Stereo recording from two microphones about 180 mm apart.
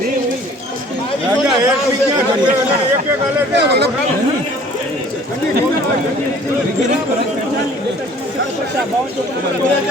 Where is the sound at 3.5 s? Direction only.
70° right (ahead or behind).